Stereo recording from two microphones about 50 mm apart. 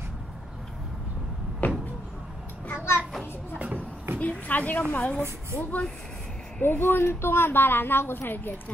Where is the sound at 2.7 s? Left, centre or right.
Left.